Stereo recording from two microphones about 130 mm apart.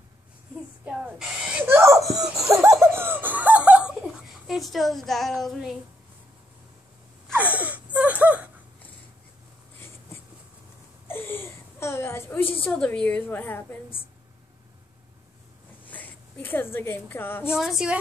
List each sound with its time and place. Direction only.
0.8 s a sound: 5° right (ahead or behind); by 2.0 s 20° right (ahead or behind)
2.0 s speech: 5° right (ahead or behind)
2.3 s laughter: 25° right (ahead or behind); by 3.9 s 10° right (ahead or behind)
4.5 s a woman's voice: centre (ahead or behind)
7.3 s gasp: 10° right (ahead or behind)
11.1 s whimper: 15° left (ahead or behind)
12.6 s a woman's voice: 10° left (ahead or behind)
15.9 s a woman's voice: 15° left (ahead or behind)
17.5 s a woman's voice: 5° right (ahead or behind)